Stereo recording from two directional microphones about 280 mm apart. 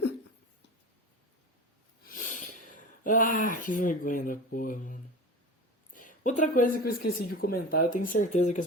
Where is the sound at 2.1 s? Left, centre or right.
Left.